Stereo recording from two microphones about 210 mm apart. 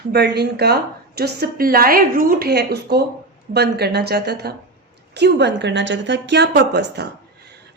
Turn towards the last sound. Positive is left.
turn(degrees=-55)  # may be behind; listen again after turning